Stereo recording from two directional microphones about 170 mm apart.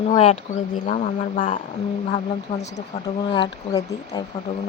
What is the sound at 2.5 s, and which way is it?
Speech, 35° left (ahead or behind).